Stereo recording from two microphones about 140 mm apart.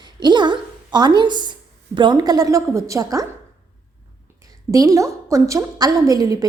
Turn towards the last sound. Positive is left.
turn(degrees=-25)  # may be behind; listen again after turning